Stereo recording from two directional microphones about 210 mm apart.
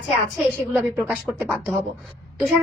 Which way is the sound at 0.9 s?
10° right (ahead or behind).